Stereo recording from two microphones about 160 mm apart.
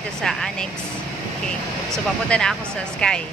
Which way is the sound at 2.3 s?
5° left (ahead or behind).